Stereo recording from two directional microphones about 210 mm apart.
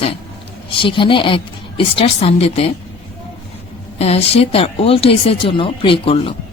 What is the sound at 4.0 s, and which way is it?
Speech, 30° left (ahead or behind).